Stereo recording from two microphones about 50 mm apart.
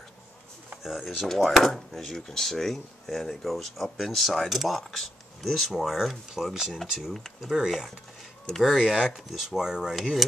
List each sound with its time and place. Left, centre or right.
0.8 s speech: centre
8.5 s speech: centre
9.9 s speech: centre